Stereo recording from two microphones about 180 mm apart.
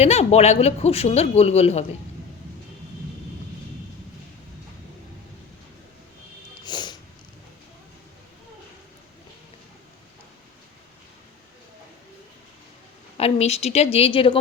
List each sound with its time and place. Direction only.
0.0 s speech: 35° left (ahead or behind)
6.7 s snort: 25° left (ahead or behind)
13.1 s speech: 35° left (ahead or behind)